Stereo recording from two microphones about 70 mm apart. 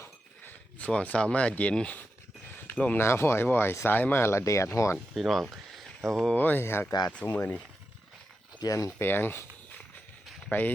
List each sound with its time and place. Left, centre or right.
0.8 s speech: centre
3.0 s speech: left
5.1 s speech: centre
6.3 s speech: left
8.5 s speech: left
9.0 s speech: left
10.5 s speech: left